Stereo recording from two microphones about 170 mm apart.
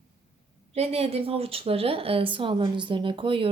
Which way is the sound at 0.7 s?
35° right (ahead or behind).